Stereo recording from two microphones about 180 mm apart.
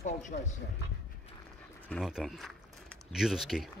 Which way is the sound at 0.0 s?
40° left (ahead or behind).